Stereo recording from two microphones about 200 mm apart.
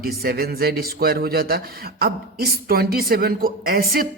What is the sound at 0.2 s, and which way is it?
Speech, 50° right (ahead or behind).